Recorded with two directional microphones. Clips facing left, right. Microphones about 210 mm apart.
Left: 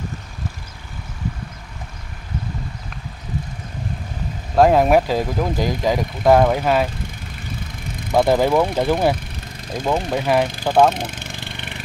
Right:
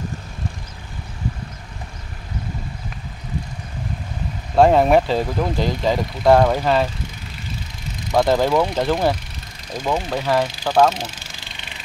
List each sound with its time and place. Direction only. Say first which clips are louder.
4.6 s speech: even; 5° left (ahead or behind)
8.1 s speech: left 1 dB; 10° left (ahead or behind)
11.0 s vehicle: left 3 dB; 55° left (ahead or behind)